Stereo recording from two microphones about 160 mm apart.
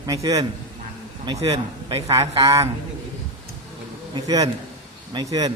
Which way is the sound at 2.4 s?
20° right (ahead or behind).